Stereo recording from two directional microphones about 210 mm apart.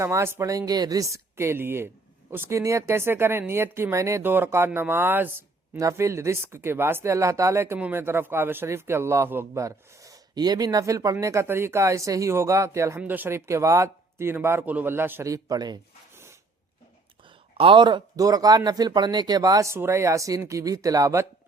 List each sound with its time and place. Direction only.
0.0 s speech: 15° right (ahead or behind)
17.6 s speech: 25° right (ahead or behind)